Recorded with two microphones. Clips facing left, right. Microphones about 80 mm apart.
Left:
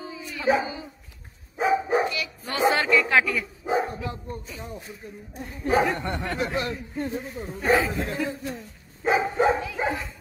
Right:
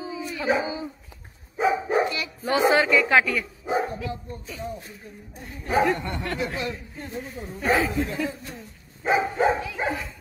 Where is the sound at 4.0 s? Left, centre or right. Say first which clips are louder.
Even; left.